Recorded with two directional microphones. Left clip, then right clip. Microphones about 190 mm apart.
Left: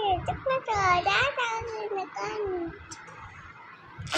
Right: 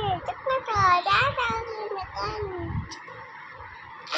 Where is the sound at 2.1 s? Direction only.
20° left (ahead or behind).